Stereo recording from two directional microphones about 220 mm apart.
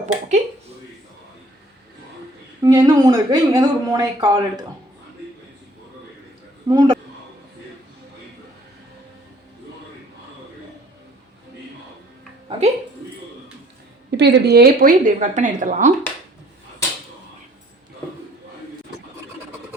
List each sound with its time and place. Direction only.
0.0 s speech: 35° right (ahead or behind)
2.6 s speech: 15° right (ahead or behind)
6.7 s speech: 20° right (ahead or behind)
12.5 s music: 30° right (ahead or behind)
14.1 s a woman's voice: 50° right (ahead or behind); by 15.9 s 35° right (ahead or behind)